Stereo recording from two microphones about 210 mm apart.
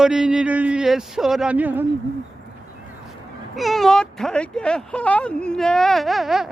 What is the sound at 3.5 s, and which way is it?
Speech, centre (ahead or behind).